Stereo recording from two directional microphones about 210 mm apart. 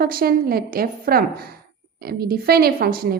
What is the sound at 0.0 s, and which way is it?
Speech, 45° right (ahead or behind).